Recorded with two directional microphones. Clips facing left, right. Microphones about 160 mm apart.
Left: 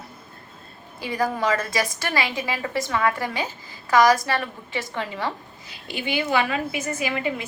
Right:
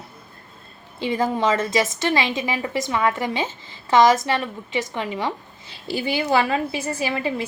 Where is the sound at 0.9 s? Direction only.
25° right (ahead or behind).